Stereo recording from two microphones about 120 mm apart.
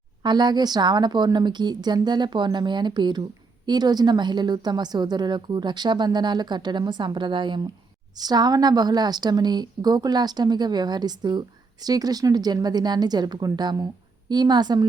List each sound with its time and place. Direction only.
0.2 s a woman's voice: 35° right (ahead or behind)